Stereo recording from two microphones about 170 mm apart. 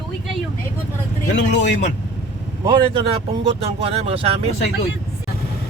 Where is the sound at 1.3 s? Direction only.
90° left.